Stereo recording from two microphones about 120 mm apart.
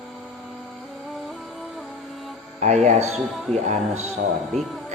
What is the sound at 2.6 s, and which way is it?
Speech, 75° right (ahead or behind).